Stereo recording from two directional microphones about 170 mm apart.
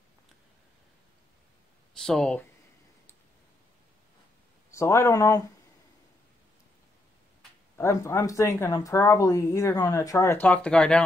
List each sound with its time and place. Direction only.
2.0 s speech: 5° left (ahead or behind)
4.6 s speech: 15° left (ahead or behind)
7.7 s speech: 15° left (ahead or behind)